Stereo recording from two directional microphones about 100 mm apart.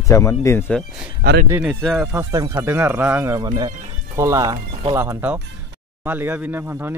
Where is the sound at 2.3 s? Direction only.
35° right (ahead or behind).